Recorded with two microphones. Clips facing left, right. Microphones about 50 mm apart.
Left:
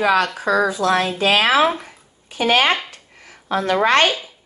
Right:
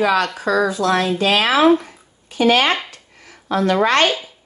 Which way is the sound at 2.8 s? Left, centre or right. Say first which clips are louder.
Even; left.